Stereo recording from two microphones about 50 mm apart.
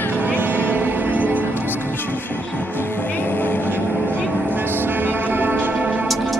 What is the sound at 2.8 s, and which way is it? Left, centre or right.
Music, left.